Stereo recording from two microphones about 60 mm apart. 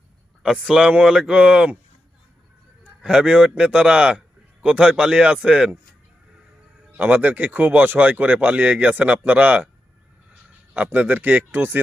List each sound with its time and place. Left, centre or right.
0.4 s a man's voice: centre
3.0 s a man's voice: centre
6.9 s speech: right
10.9 s speech: right